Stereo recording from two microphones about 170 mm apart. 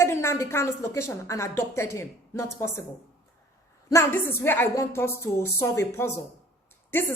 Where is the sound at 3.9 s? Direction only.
15° left (ahead or behind).